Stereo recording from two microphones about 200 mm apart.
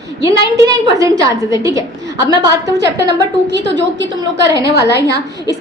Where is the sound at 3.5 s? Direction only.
65° right (ahead or behind).